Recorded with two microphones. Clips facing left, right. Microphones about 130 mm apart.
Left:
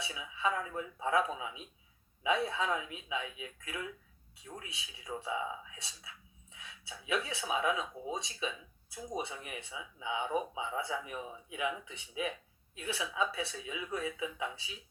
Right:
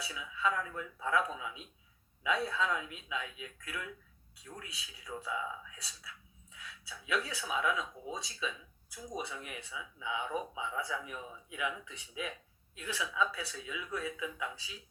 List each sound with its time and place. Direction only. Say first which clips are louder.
0.0 s speech: even; 25° left (ahead or behind)